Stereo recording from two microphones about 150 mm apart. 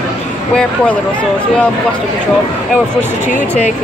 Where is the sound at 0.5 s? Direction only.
10° left (ahead or behind).